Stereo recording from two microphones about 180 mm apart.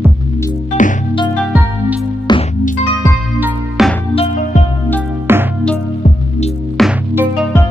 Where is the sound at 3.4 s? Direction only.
Centre (ahead or behind).